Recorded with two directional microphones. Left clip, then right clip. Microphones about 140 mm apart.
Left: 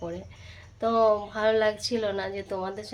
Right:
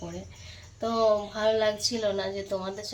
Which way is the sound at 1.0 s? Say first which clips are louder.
Right 2 dB; 15° left (ahead or behind).